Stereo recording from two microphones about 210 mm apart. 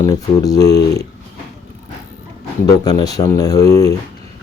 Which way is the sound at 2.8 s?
20° left (ahead or behind).